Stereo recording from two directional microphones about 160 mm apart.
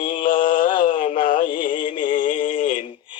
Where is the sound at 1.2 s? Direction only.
60° left (ahead or behind).